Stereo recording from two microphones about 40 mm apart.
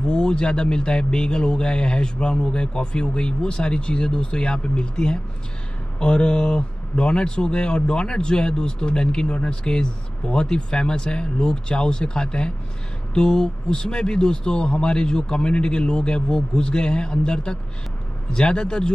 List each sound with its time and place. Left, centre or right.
0.1 s a man's voice: left